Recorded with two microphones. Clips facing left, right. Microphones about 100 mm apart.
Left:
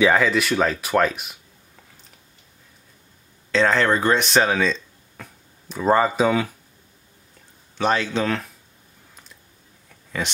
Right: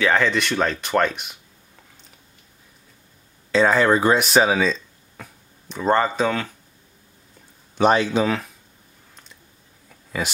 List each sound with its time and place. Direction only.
0.0 s speech: 5° left (ahead or behind)
3.5 s speech: 10° right (ahead or behind); by 6.5 s 10° left (ahead or behind)
7.7 s speech: 15° right (ahead or behind); by 8.5 s centre (ahead or behind)
9.1 s a sound: centre (ahead or behind)